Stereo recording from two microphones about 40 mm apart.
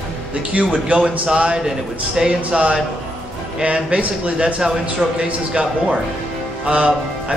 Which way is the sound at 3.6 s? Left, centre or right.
Right.